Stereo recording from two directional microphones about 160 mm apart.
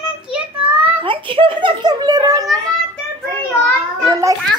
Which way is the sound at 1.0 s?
30° right (ahead or behind).